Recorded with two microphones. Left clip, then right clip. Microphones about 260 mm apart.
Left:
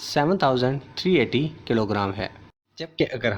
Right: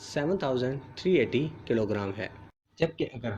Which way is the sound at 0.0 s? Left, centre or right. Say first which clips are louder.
Left 8 dB; left.